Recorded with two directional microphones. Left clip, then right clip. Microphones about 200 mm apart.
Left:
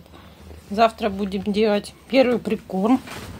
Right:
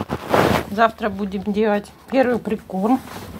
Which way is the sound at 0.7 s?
20° left (ahead or behind).